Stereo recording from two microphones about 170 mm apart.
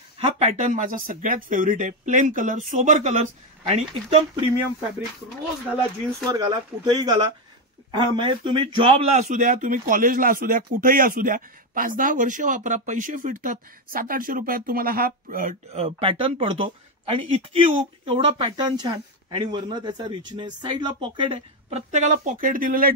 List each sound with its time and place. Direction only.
0.2 s speech: 40° right (ahead or behind)
6.3 s speech: 25° right (ahead or behind)
9.1 s speech: 45° right (ahead or behind)
15.8 s speech: 35° right (ahead or behind); by 22.9 s 55° right (ahead or behind)